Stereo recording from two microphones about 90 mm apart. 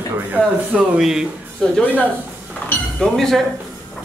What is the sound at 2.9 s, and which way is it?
Speech, 5° left (ahead or behind).